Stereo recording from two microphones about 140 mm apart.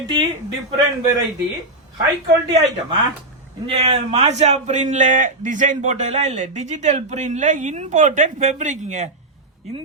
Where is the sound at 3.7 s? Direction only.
50° right (ahead or behind).